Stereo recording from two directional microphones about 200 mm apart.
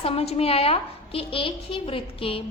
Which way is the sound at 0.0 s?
30° left (ahead or behind).